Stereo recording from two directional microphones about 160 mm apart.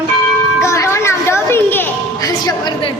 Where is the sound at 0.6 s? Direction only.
20° left (ahead or behind).